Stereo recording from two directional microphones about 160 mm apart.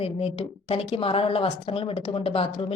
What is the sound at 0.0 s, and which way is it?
A woman's voice, 35° left (ahead or behind).